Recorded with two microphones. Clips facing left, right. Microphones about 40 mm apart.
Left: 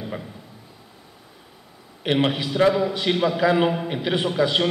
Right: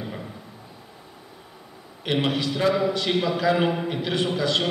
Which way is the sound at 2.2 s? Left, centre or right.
Centre.